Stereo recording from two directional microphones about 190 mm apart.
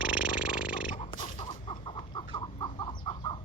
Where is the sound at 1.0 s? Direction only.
40° left (ahead or behind).